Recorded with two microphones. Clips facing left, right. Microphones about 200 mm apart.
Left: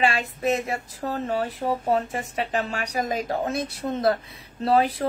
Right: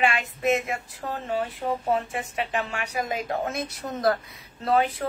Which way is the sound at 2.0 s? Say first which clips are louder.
Left 2 dB; 40° left (ahead or behind).